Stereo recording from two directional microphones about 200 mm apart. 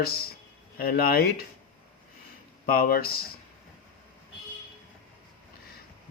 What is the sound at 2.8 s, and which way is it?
Speech, 50° left (ahead or behind).